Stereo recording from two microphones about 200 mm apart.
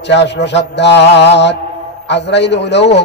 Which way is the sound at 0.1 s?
60° left (ahead or behind).